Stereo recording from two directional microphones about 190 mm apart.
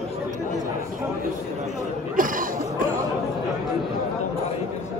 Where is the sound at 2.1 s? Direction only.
45° right (ahead or behind).